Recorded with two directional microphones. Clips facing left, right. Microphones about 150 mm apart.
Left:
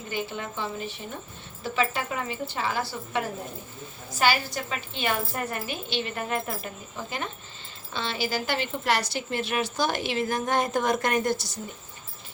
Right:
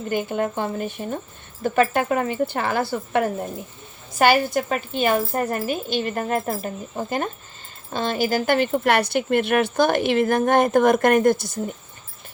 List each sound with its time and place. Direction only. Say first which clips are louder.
0.1 s a woman's voice: right 9 dB; 50° right (ahead or behind)